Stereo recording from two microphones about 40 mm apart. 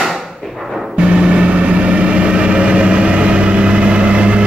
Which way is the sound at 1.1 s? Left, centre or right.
Right.